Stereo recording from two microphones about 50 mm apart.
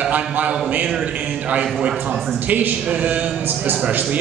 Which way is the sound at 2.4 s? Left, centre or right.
Right.